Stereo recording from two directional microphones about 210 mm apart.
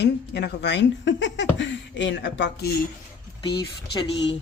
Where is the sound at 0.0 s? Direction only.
55° left (ahead or behind).